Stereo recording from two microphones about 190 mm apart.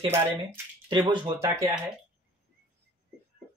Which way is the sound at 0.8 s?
25° right (ahead or behind).